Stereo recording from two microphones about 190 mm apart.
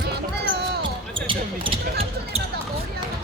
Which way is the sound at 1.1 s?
25° right (ahead or behind).